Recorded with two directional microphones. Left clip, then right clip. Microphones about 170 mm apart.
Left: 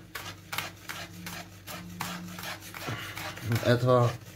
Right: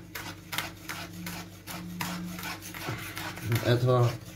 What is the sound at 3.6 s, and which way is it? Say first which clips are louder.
Speech: left 3 dB; 35° left (ahead or behind).